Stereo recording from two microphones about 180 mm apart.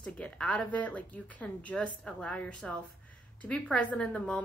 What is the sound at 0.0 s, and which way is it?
A woman's voice, 5° left (ahead or behind).